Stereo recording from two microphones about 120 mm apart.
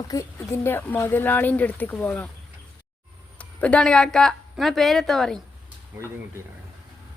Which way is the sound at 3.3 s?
10° left (ahead or behind).